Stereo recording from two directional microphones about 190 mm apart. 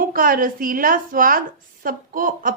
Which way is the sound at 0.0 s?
50° right (ahead or behind).